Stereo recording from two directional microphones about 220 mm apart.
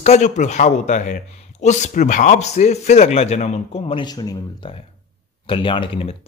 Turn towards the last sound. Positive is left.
turn(degrees=25)  # may be behind; listen again after turning